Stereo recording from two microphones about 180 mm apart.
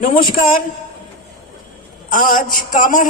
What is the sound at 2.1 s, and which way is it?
Speech, 50° left (ahead or behind).